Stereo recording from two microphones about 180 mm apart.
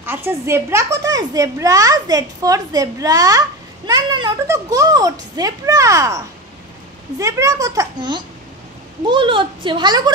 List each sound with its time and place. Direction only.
0.0 s a woman's voice: 10° right (ahead or behind)